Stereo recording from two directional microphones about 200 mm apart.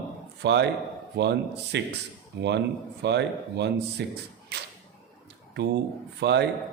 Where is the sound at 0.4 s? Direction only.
60° right (ahead or behind).